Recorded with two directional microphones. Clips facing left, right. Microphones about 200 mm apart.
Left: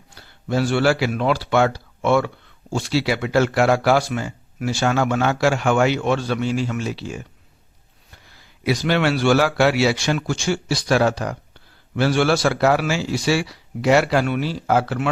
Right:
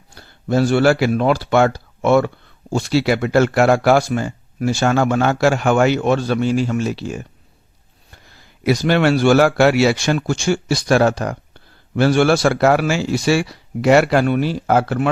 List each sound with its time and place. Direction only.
0.1 s a man's voice: 45° right (ahead or behind)
8.6 s speech: 45° right (ahead or behind)